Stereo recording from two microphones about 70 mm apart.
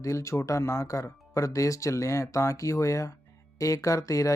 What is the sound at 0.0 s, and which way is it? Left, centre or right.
Speech, left.